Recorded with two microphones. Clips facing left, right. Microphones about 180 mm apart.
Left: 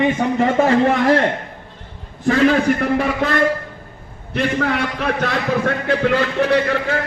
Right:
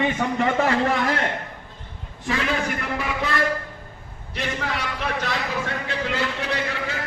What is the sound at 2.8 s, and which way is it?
Speech, 55° left (ahead or behind).